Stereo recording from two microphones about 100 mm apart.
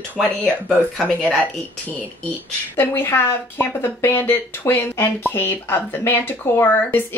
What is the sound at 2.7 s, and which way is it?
Speech, 20° left (ahead or behind).